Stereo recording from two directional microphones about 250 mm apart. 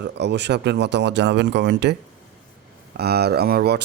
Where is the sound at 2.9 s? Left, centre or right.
Right.